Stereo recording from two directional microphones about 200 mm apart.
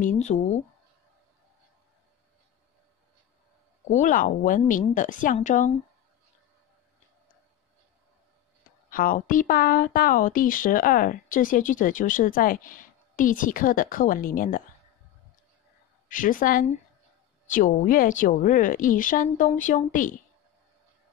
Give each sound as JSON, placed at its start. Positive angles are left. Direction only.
{"t": 0.0, "sound": "a woman's voice", "side_deg": 35}
{"t": 3.9, "sound": "a woman's voice", "side_deg": 40}
{"t": 8.9, "sound": "speech", "side_deg": 45}
{"t": 16.1, "sound": "a woman's voice", "side_deg": 40}